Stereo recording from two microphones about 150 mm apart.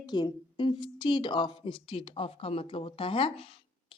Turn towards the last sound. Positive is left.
turn(degrees=35)  # may be behind; listen again after turning